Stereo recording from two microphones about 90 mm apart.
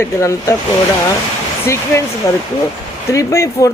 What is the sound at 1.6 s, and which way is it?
Speech, 30° left (ahead or behind).